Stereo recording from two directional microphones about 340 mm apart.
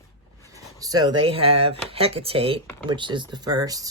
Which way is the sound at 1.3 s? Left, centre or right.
Centre.